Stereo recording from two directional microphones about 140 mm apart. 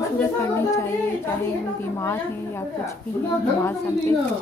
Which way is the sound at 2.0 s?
20° left (ahead or behind).